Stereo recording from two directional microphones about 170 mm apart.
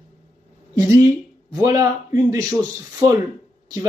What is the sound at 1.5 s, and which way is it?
Speech, 20° right (ahead or behind).